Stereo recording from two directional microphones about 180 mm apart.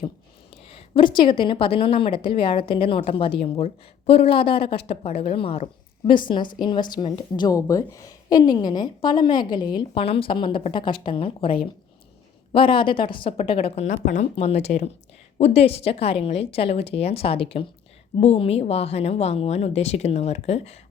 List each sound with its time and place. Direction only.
0.7 s a woman's voice: 30° left (ahead or behind)
13.9 s a woman's voice: 45° left (ahead or behind)